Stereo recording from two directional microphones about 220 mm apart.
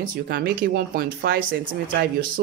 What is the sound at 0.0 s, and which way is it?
Speech, 40° right (ahead or behind).